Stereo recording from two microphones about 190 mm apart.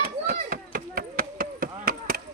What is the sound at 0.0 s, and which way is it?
Chop, 50° right (ahead or behind).